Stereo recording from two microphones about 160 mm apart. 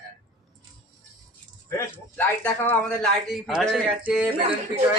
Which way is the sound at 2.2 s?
10° left (ahead or behind).